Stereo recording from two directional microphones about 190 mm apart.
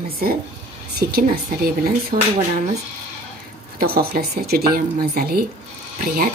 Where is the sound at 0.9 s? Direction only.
55° right (ahead or behind).